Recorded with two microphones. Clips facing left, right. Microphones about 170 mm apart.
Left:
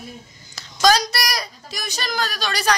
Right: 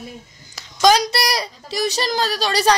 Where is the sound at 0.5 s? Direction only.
20° right (ahead or behind).